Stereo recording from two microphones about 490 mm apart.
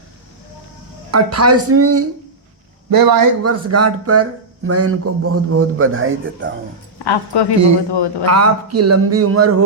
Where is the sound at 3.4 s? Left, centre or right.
Right.